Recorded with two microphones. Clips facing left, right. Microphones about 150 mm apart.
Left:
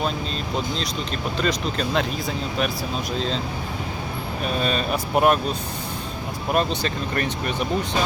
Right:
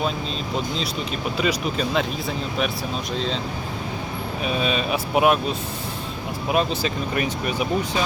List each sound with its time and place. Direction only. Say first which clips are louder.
1.4 s speech: right 1 dB; 5° right (ahead or behind)
3.2 s speech: even; centre (ahead or behind)
4.4 s speech: even; 5° right (ahead or behind)